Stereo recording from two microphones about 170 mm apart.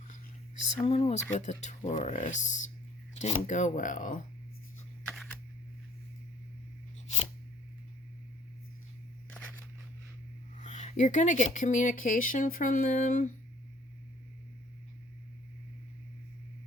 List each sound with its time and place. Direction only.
0.9 s speech: 40° left (ahead or behind)
10.6 s speech: 45° left (ahead or behind)